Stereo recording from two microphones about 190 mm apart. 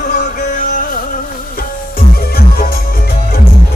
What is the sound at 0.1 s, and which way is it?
Music, 45° left (ahead or behind).